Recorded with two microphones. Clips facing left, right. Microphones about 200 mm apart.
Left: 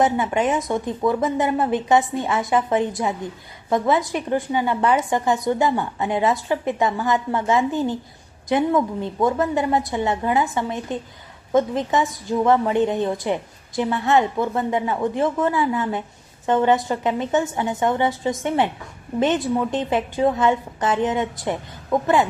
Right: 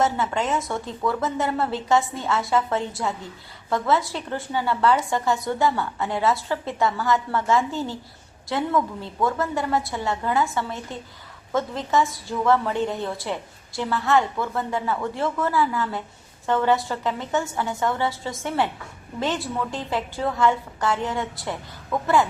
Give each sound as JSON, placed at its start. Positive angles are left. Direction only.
{"t": 0.0, "sound": "a woman's voice", "side_deg": 15}